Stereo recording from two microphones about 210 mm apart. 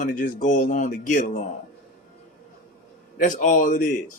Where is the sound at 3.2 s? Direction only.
40° left (ahead or behind).